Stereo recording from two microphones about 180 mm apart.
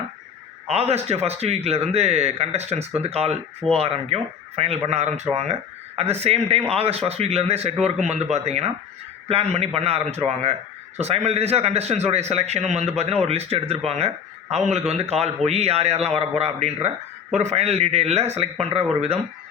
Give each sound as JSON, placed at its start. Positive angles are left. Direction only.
{"t": 0.7, "sound": "a man's voice", "side_deg": -35}